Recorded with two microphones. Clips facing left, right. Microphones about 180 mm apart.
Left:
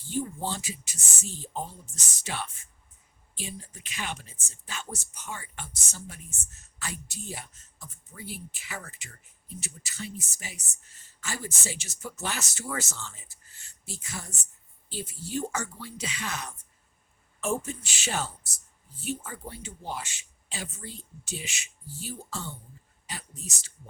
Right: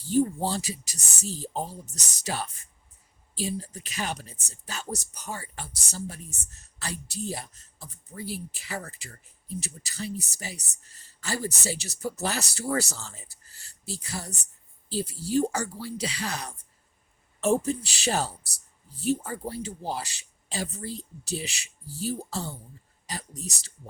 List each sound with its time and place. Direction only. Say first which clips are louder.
0.1 s speech: right 7 dB; 40° right (ahead or behind)